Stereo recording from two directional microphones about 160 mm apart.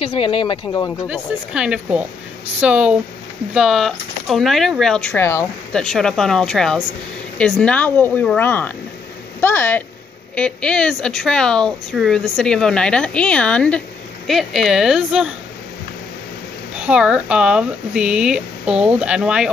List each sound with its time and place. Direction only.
0.0 s speech: 35° left (ahead or behind)
1.0 s speech: 5° right (ahead or behind)
16.7 s speech: 5° right (ahead or behind)